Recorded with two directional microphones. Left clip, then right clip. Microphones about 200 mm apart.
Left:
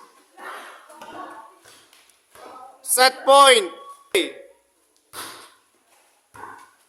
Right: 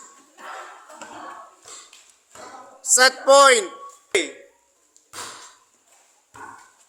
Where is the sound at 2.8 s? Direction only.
10° left (ahead or behind).